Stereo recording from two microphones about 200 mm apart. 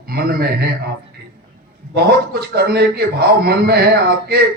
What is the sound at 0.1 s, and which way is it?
Speech, 50° right (ahead or behind).